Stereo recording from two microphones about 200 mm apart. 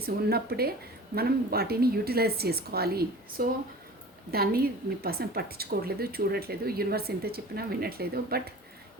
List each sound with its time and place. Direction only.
0.0 s speech: 50° right (ahead or behind)